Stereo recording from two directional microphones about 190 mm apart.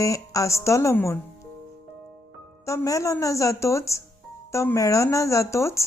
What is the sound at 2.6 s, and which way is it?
Speech, 15° left (ahead or behind).